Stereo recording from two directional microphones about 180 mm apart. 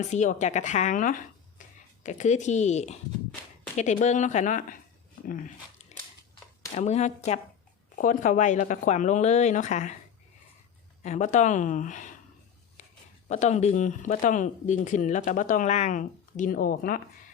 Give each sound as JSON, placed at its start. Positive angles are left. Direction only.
{"t": 0.1, "sound": "speech", "side_deg": 40}
{"t": 6.7, "sound": "speech", "side_deg": 40}
{"t": 11.0, "sound": "speech", "side_deg": 40}
{"t": 12.8, "sound": "a sound", "side_deg": 45}
{"t": 13.2, "sound": "speech", "side_deg": 40}